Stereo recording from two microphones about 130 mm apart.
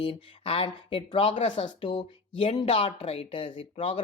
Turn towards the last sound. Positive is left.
turn(degrees=45)  # may be behind; listen again after turning